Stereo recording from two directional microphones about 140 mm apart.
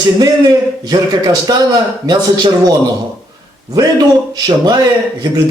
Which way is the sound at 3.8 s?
25° right (ahead or behind).